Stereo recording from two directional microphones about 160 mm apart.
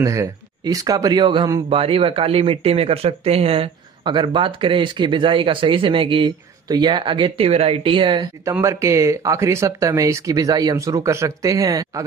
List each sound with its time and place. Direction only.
0.0 s speech: 20° right (ahead or behind)
8.5 s speech: 15° right (ahead or behind)